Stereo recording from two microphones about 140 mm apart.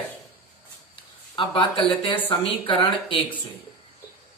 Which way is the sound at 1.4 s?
40° left (ahead or behind).